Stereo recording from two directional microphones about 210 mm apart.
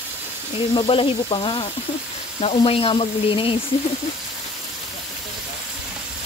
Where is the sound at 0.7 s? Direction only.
25° left (ahead or behind).